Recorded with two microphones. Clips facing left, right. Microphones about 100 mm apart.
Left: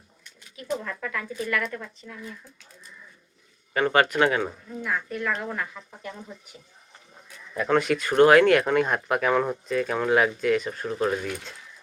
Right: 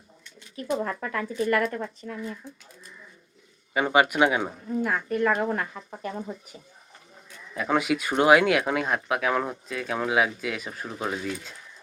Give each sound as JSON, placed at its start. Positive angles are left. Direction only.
{"t": 0.5, "sound": "speech", "side_deg": -35}
{"t": 3.8, "sound": "speech", "side_deg": -10}
{"t": 4.8, "sound": "speech", "side_deg": -50}
{"t": 7.5, "sound": "speech", "side_deg": -5}